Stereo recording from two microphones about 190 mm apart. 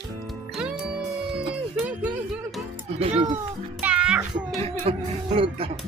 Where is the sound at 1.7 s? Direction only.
5° right (ahead or behind).